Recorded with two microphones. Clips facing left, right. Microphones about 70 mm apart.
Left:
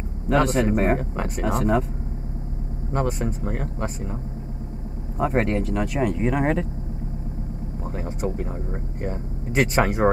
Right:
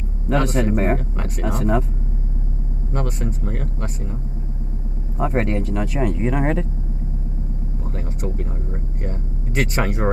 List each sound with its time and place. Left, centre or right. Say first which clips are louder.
0.3 s speech: even; centre
2.9 s speech: left 2 dB; centre
7.8 s speech: left 2 dB; centre